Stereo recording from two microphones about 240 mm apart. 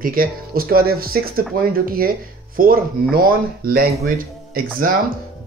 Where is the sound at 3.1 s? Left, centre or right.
Right.